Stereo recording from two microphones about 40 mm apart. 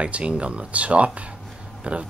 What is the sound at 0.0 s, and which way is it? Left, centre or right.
Speech, right.